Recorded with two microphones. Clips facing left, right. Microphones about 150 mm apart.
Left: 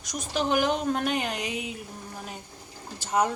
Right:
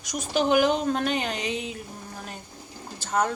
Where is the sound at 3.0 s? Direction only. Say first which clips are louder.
Even; 15° left (ahead or behind).